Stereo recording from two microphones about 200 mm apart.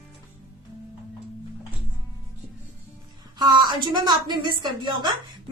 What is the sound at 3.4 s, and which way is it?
A woman's voice, 20° right (ahead or behind).